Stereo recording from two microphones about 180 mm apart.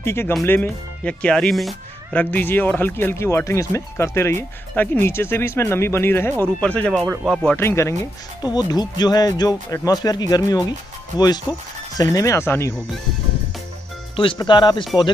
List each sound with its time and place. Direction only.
0.0 s speech: 15° left (ahead or behind)
7.0 s speech: 5° right (ahead or behind)
7.4 s speech: 15° left (ahead or behind)
14.1 s speech: 30° left (ahead or behind)